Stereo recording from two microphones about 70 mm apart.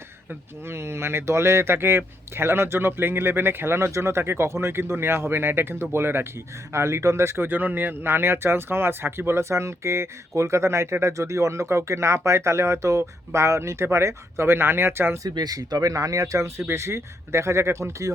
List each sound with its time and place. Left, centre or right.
0.6 s speech: right
15.4 s speech: right